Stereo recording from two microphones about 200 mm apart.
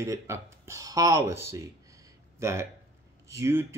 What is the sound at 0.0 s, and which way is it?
Speech, 15° right (ahead or behind).